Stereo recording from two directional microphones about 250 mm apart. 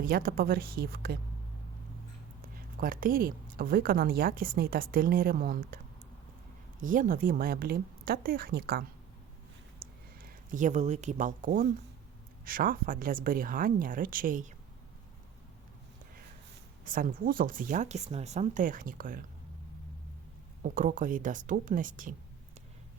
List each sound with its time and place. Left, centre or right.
0.0 s speech: right
2.4 s speech: right
6.8 s speech: right
10.2 s speech: right
16.8 s speech: right
20.6 s speech: right